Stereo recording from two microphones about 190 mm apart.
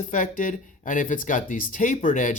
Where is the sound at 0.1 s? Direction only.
45° left (ahead or behind).